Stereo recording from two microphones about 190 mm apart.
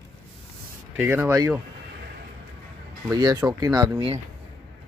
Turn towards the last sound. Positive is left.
turn(degrees=-20)  # may be behind; listen again after turning